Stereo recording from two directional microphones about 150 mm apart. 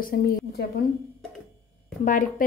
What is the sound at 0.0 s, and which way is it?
Speech, 75° left (ahead or behind).